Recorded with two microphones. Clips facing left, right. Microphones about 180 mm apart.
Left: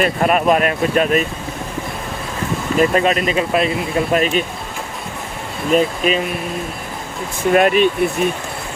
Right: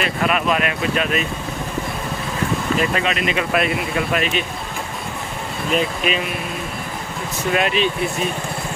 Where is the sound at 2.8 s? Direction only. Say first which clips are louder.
Left 6 dB; 40° left (ahead or behind).